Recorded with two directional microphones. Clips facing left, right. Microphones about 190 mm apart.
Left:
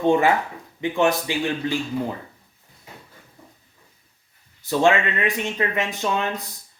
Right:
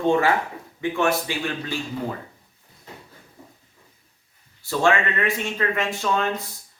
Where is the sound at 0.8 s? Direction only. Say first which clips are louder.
Left 2 dB; 20° left (ahead or behind).